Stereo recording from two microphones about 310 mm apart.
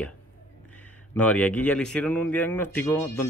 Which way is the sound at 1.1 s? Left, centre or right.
Centre.